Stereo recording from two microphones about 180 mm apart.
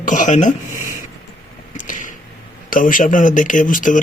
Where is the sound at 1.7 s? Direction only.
45° left (ahead or behind).